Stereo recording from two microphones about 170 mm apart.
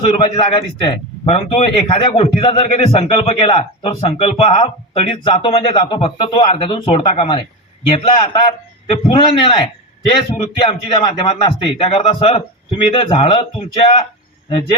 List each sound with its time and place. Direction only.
0.0 s a man's voice: 35° left (ahead or behind)